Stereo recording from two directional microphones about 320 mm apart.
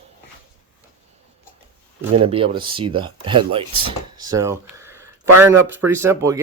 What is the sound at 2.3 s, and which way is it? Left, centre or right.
Speech, centre.